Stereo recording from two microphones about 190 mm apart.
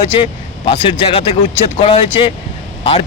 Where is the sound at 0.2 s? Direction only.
25° left (ahead or behind).